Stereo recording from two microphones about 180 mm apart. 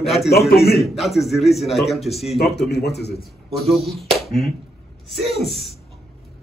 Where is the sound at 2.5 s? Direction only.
70° left (ahead or behind).